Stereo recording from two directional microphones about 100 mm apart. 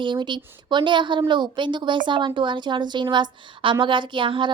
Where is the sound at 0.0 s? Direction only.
50° right (ahead or behind).